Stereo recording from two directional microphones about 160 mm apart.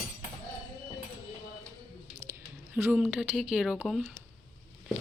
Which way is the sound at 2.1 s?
15° right (ahead or behind).